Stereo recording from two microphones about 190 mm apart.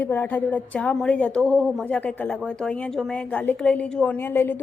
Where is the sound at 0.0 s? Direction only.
10° left (ahead or behind).